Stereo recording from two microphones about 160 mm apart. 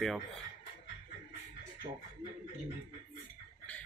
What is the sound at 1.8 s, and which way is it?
Speech, 50° right (ahead or behind).